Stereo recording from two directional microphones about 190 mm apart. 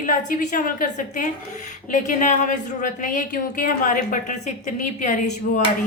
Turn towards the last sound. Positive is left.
turn(degrees=40)  # may be behind; listen again after turning